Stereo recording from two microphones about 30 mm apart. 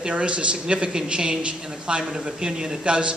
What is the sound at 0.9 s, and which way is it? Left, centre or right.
A woman's voice, right.